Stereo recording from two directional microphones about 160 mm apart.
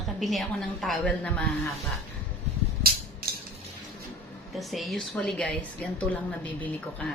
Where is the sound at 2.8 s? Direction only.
70° right (ahead or behind).